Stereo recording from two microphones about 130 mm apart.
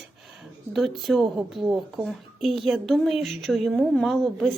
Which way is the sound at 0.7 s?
Centre (ahead or behind).